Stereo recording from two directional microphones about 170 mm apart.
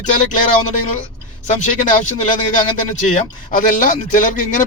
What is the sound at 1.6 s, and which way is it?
Speech, 45° left (ahead or behind).